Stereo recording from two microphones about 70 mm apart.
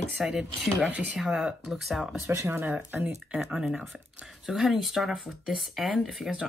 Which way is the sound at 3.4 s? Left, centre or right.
Centre.